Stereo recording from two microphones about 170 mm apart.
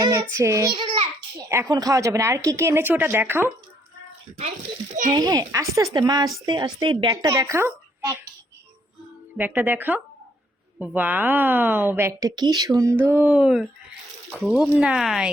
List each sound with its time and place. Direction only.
0.0 s child singing: 15° right (ahead or behind)
1.5 s a woman's voice: 20° right (ahead or behind)
5.1 s speech: 25° right (ahead or behind)
9.4 s a woman's voice: 10° right (ahead or behind)